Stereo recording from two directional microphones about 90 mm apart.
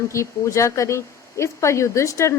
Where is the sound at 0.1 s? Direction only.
35° left (ahead or behind).